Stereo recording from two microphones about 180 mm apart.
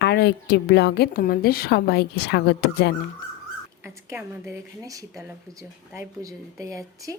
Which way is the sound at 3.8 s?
15° right (ahead or behind).